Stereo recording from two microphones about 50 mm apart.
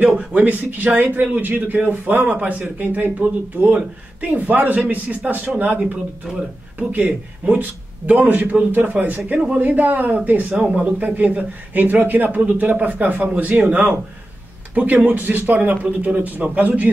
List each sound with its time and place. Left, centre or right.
0.2 s a man's voice: right
6.2 s speech: centre
6.8 s a man's voice: right